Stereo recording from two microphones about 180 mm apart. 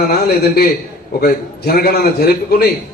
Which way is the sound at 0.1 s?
60° left (ahead or behind).